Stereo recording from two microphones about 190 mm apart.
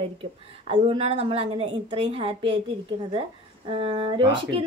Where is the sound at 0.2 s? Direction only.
30° right (ahead or behind).